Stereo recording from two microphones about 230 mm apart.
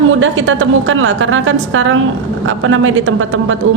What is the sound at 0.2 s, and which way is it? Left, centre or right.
A man's voice, right.